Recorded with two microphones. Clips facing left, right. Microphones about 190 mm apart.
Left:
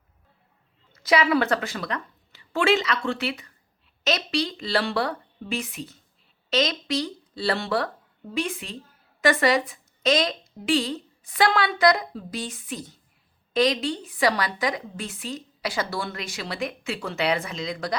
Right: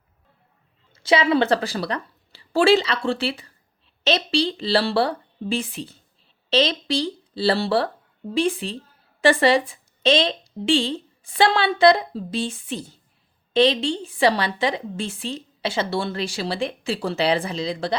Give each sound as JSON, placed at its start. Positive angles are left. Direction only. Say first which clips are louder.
{"t": 0.9, "sound": "a woman's voice", "louder": "right 3 dB", "side_deg": -25}